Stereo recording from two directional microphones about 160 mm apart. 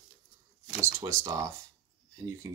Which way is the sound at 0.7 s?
20° right (ahead or behind).